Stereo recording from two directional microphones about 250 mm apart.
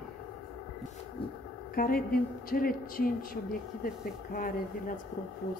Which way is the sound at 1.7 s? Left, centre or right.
Left.